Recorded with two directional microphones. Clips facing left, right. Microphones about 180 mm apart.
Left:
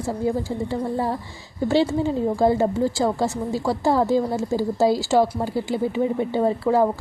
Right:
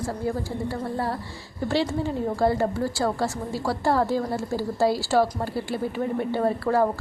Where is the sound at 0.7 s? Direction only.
15° left (ahead or behind).